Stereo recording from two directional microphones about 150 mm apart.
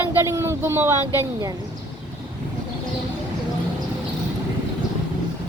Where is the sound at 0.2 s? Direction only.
20° right (ahead or behind).